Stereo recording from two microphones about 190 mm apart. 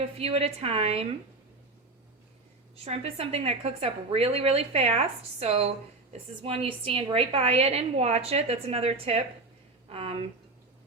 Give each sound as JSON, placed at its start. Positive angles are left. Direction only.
{"t": 0.2, "sound": "a woman's voice", "side_deg": -30}
{"t": 2.8, "sound": "a woman's voice", "side_deg": -30}